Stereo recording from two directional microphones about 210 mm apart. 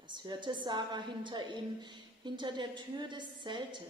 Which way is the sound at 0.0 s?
20° right (ahead or behind).